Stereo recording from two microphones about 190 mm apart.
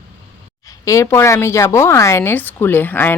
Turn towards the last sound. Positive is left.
turn(degrees=10)  # may be behind; listen again after turning